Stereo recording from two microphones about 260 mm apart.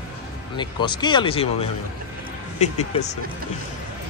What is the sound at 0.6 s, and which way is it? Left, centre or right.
Speech, centre.